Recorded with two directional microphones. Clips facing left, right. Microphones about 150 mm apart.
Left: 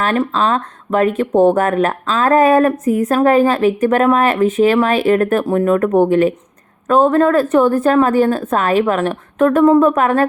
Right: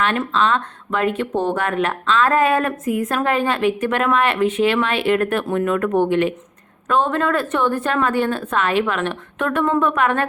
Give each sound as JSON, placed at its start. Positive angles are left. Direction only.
{"t": 0.0, "sound": "speech", "side_deg": 40}